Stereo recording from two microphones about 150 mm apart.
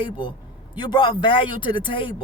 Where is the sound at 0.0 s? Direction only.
35° left (ahead or behind).